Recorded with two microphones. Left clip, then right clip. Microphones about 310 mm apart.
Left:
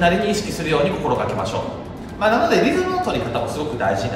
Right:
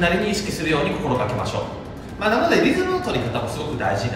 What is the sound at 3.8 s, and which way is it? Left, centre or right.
Speech, centre.